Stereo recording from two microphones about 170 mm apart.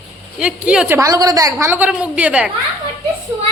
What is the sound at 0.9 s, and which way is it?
A woman's voice, 20° right (ahead or behind).